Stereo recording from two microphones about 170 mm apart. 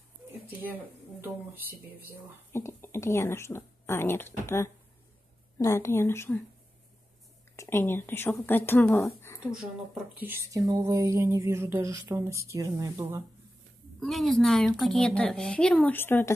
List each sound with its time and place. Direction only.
2.5 s speech: 15° left (ahead or behind)
7.5 s speech: 15° left (ahead or behind)
10.2 s a sound: 15° right (ahead or behind)
13.9 s speech: centre (ahead or behind)